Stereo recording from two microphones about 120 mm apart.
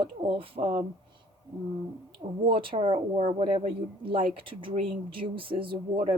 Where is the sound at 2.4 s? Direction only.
45° right (ahead or behind).